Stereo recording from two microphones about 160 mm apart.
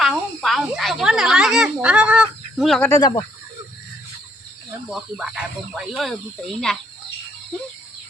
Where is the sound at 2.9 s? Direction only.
20° left (ahead or behind).